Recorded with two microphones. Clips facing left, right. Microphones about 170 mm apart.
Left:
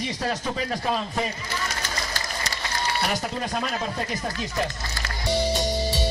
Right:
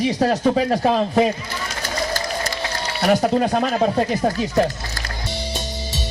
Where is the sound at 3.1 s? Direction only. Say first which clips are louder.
Right 11 dB; 55° right (ahead or behind).